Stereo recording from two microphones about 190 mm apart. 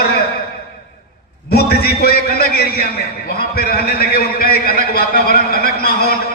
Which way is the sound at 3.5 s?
55° left (ahead or behind).